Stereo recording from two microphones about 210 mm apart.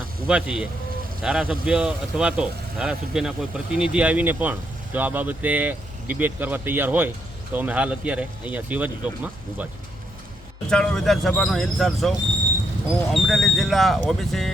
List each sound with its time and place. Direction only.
0.3 s speech: 5° right (ahead or behind)
10.7 s speech: 5° left (ahead or behind)
13.1 s speech: centre (ahead or behind)